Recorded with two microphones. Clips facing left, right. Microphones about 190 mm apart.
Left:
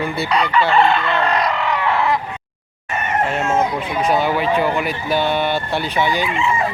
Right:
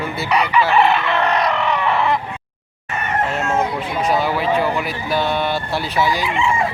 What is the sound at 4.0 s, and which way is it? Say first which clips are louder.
Speech: left 1 dB; centre (ahead or behind).